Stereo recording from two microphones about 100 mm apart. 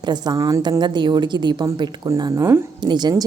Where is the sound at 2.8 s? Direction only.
45° right (ahead or behind).